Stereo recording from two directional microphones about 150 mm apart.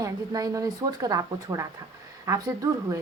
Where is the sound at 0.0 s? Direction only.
25° right (ahead or behind).